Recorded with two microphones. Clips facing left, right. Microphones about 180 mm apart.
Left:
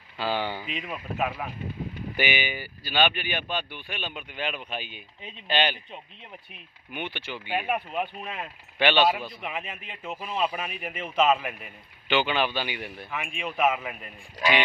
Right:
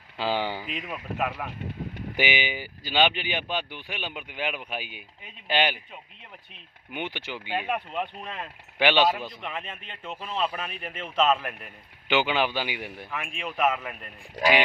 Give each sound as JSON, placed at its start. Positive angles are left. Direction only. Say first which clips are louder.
{"t": 0.2, "sound": "speech", "louder": "right 1 dB", "side_deg": -15}
{"t": 0.7, "sound": "speech", "louder": "even", "side_deg": 0}
{"t": 2.1, "sound": "speech", "louder": "right 1 dB", "side_deg": -15}
{"t": 6.9, "sound": "speech", "louder": "right 1 dB", "side_deg": -15}
{"t": 7.5, "sound": "speech", "louder": "left 1 dB", "side_deg": 10}
{"t": 8.8, "sound": "speech", "louder": "even", "side_deg": -15}
{"t": 9.4, "sound": "speech", "louder": "left 1 dB", "side_deg": 5}
{"t": 12.0, "sound": "speech", "louder": "right 1 dB", "side_deg": -15}
{"t": 13.1, "sound": "speech", "louder": "left 2 dB", "side_deg": 0}